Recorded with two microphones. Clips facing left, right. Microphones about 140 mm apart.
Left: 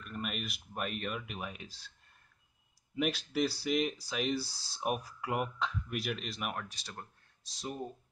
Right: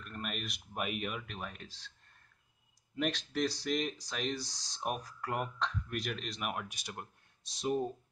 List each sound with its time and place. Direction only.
0.0 s a sound: centre (ahead or behind)
0.8 s speech: 5° right (ahead or behind)
1.2 s speech: 10° left (ahead or behind)
3.0 s speech: 5° left (ahead or behind)
6.5 s speech: 10° right (ahead or behind)